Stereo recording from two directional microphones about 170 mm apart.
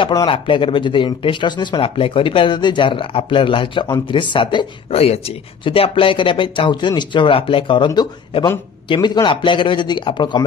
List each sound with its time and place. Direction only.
0.0 s speech: 25° left (ahead or behind)